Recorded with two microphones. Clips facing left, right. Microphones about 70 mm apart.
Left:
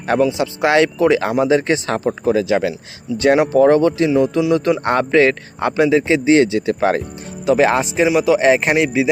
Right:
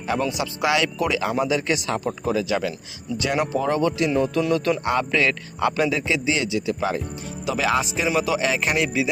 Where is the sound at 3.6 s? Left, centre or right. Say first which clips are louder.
Left 10 dB; left.